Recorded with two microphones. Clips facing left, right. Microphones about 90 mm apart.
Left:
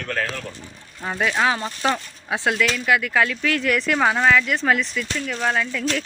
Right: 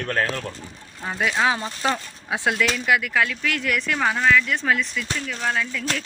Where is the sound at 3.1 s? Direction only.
Centre (ahead or behind).